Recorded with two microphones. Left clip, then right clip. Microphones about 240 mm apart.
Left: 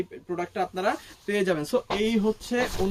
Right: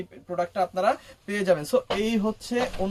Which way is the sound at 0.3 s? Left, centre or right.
Centre.